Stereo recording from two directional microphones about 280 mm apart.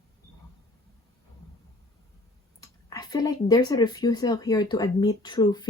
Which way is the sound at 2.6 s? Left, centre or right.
Centre.